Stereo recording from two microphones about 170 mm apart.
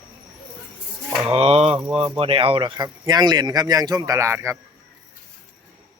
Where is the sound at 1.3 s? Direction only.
35° right (ahead or behind).